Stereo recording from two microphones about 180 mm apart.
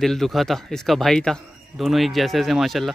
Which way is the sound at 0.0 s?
Centre (ahead or behind).